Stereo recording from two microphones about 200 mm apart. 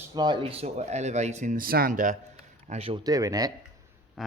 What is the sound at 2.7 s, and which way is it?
Speech, 30° right (ahead or behind).